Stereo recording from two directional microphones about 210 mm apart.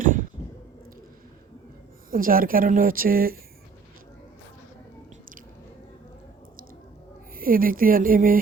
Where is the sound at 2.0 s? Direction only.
40° right (ahead or behind).